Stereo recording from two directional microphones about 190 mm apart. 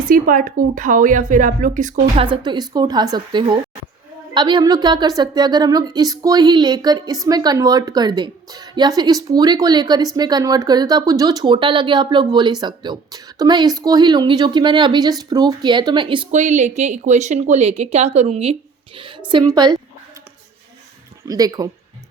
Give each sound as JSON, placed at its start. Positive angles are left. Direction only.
{"t": 0.1, "sound": "a woman's voice", "side_deg": -45}
{"t": 2.2, "sound": "a woman's voice", "side_deg": -25}
{"t": 16.3, "sound": "speech", "side_deg": -40}
{"t": 18.9, "sound": "a sound", "side_deg": -25}
{"t": 19.3, "sound": "a woman's voice", "side_deg": -20}
{"t": 21.2, "sound": "a woman's voice", "side_deg": -20}